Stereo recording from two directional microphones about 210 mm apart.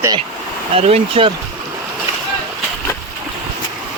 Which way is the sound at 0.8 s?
30° right (ahead or behind).